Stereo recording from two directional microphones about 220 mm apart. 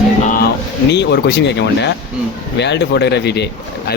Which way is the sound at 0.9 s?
50° left (ahead or behind).